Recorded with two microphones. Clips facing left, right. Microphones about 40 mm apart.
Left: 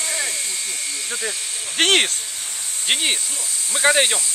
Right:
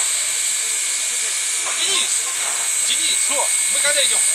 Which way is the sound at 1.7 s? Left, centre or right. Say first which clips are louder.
Left 8 dB; left.